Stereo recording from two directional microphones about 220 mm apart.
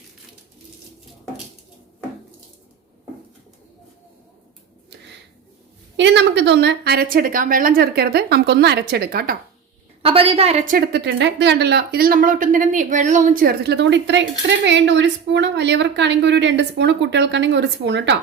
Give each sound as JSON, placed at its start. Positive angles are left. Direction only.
{"t": 6.0, "sound": "speech", "side_deg": -55}
{"t": 10.0, "sound": "a woman's voice", "side_deg": -25}
{"t": 10.8, "sound": "speech", "side_deg": -45}